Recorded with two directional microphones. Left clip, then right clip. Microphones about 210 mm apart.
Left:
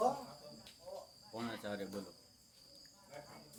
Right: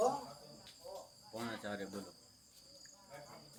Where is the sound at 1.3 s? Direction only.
10° left (ahead or behind).